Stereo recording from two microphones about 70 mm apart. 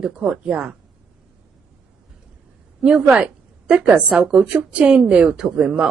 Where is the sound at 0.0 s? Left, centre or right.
Centre.